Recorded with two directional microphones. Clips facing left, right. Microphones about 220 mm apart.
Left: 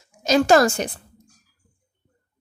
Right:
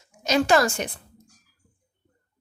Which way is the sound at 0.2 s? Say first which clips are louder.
Left 4 dB; 40° left (ahead or behind).